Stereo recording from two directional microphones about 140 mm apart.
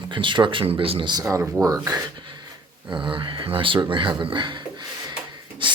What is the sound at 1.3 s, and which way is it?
Speech, 20° right (ahead or behind).